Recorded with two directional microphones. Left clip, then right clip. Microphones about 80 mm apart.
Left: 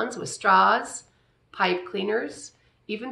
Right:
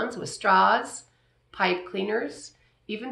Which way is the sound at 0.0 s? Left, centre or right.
Left.